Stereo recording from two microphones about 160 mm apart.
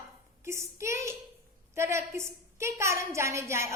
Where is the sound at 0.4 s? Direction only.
15° right (ahead or behind).